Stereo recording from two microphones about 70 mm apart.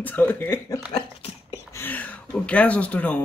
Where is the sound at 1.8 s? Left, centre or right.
Left.